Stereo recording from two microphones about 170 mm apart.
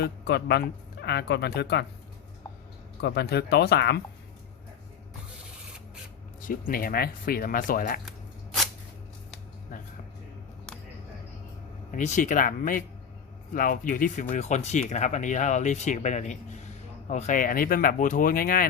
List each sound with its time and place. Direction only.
0.0 s speech: 70° left (ahead or behind)
3.0 s speech: 75° left (ahead or behind)
6.4 s speech: 55° left (ahead or behind)
11.9 s speech: 45° left (ahead or behind)